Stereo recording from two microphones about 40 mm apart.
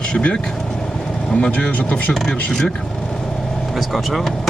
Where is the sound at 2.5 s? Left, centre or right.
Centre.